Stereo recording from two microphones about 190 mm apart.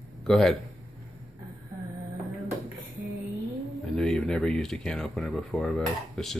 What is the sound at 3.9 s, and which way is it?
Speech, 5° left (ahead or behind).